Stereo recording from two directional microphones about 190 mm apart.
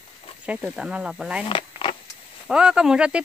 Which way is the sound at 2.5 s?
5° right (ahead or behind).